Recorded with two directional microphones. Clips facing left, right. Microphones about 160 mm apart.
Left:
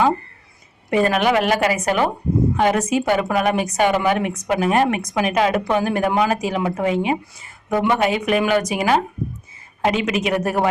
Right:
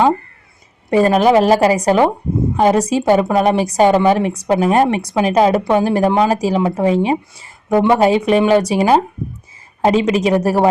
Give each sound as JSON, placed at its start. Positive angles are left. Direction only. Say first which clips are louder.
{"t": 0.9, "sound": "a woman's voice", "louder": "right 6 dB", "side_deg": -35}